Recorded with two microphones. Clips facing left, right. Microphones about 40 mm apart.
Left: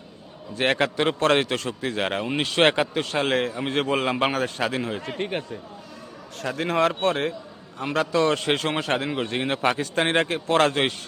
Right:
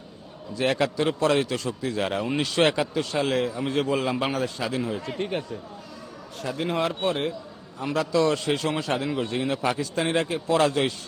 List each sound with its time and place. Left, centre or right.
0.5 s a man's voice: left
6.3 s a man's voice: left
7.8 s a man's voice: left